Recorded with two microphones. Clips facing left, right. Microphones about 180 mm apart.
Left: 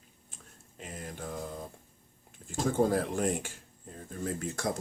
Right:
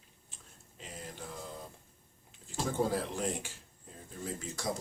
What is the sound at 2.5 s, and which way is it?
Speech, 50° left (ahead or behind).